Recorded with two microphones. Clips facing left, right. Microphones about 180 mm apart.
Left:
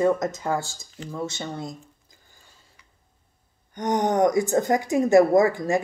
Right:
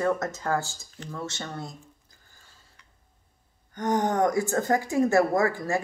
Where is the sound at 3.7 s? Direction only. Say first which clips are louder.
Left 3 dB; 20° left (ahead or behind).